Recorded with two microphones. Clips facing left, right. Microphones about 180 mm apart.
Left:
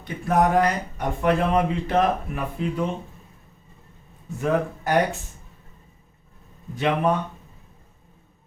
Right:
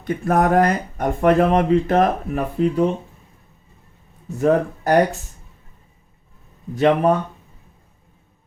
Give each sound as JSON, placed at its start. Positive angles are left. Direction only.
{"t": 0.0, "sound": "speech", "side_deg": -50}
{"t": 4.4, "sound": "speech", "side_deg": -40}
{"t": 6.7, "sound": "speech", "side_deg": -40}